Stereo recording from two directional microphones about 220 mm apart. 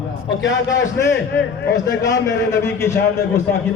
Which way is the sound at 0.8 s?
55° left (ahead or behind).